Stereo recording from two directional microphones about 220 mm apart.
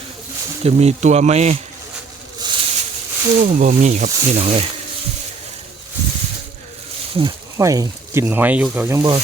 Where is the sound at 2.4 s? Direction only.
20° right (ahead or behind).